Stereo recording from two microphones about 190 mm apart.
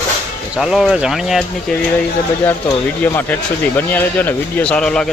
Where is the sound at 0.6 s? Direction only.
Centre (ahead or behind).